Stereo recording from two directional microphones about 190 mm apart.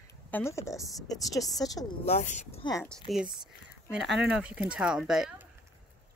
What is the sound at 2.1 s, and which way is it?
Speech, 40° left (ahead or behind).